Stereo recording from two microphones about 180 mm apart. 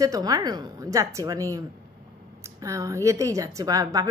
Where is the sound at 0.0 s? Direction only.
20° right (ahead or behind).